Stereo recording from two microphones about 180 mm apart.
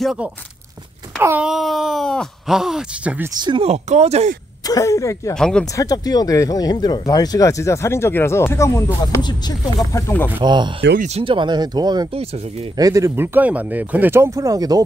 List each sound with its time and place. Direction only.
0.0 s speech: 5° right (ahead or behind)
3.3 s speech: 25° right (ahead or behind)
4.6 s speech: 20° left (ahead or behind)
5.3 s speech: 5° left (ahead or behind)
5.8 s speech: 20° left (ahead or behind)
9.9 s speech: 15° left (ahead or behind)
10.4 s speech: 25° right (ahead or behind)